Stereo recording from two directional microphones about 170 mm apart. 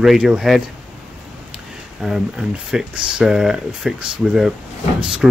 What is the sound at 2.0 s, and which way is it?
Speech, 5° right (ahead or behind).